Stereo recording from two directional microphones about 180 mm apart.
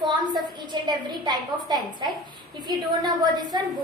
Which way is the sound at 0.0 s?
25° right (ahead or behind).